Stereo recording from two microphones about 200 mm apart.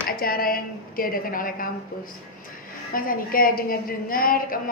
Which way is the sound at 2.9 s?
45° left (ahead or behind).